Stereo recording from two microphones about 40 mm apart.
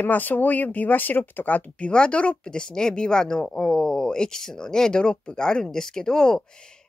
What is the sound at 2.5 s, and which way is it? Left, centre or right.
Speech, left.